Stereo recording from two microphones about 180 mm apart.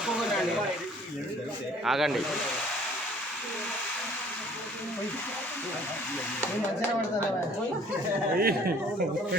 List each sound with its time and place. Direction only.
0.0 s a sound: 5° right (ahead or behind)
1.8 s speech: centre (ahead or behind)
8.4 s speech: 55° right (ahead or behind)